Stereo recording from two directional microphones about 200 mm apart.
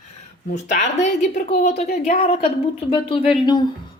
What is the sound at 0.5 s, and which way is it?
Speech, 35° left (ahead or behind).